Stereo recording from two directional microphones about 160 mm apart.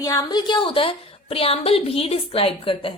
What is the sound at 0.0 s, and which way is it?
A woman's voice, 25° left (ahead or behind).